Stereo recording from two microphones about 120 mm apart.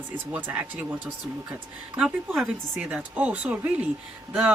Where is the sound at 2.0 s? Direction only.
10° right (ahead or behind).